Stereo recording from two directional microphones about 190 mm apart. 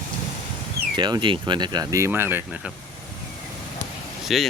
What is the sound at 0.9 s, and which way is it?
Speech, 25° right (ahead or behind).